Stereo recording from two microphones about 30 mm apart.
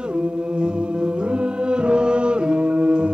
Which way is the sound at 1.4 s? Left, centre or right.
Right.